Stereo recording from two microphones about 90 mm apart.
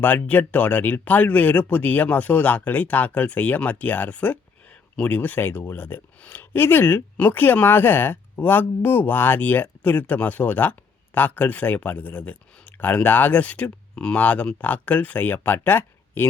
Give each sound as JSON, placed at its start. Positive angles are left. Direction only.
{"t": 0.0, "sound": "speech", "side_deg": 20}